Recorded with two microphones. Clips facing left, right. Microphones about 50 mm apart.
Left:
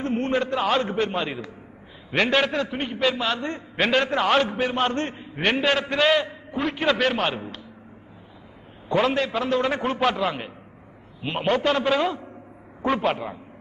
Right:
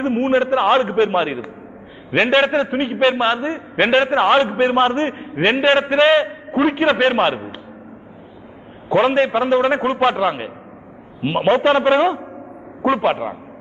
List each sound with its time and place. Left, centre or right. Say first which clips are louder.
0.0 s a man's voice: right 7 dB; right
8.8 s a man's voice: right 7 dB; right